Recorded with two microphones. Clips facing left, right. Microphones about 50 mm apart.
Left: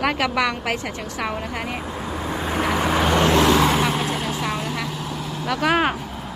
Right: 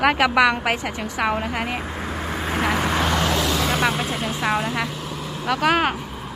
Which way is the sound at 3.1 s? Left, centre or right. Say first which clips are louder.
Left 4 dB; left.